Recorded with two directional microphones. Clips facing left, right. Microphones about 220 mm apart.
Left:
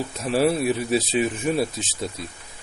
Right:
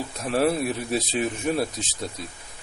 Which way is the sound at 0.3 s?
5° left (ahead or behind).